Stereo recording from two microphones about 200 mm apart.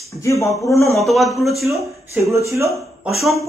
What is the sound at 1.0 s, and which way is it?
Speech, centre (ahead or behind).